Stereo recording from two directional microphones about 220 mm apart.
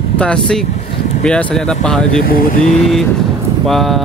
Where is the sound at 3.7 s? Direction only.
Centre (ahead or behind).